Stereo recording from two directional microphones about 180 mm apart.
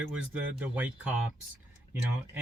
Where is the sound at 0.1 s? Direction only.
10° right (ahead or behind).